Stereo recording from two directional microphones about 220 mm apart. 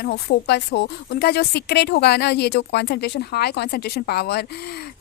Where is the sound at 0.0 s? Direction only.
45° left (ahead or behind).